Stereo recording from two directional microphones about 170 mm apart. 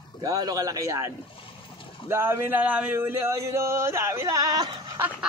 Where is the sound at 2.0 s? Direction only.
15° right (ahead or behind).